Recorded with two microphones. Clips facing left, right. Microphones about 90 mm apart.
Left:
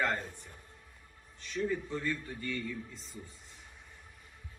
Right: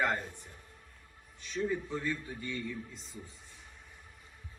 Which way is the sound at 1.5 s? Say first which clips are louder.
Even; 10° right (ahead or behind).